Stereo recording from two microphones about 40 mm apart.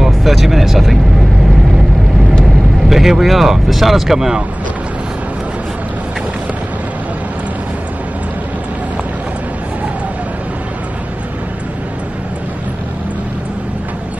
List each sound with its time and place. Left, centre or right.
0.0 s speech: centre
2.4 s speech: centre